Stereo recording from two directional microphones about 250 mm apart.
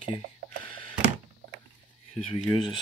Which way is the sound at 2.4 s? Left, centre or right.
Centre.